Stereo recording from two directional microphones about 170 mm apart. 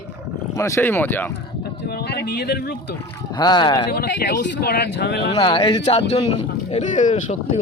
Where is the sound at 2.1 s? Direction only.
70° left (ahead or behind).